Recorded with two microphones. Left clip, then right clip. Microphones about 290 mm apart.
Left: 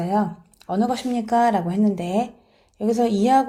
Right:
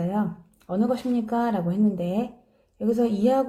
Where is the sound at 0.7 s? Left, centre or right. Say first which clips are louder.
Left 2 dB; centre.